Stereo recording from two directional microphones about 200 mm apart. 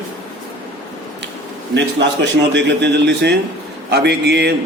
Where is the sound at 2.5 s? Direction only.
60° right (ahead or behind).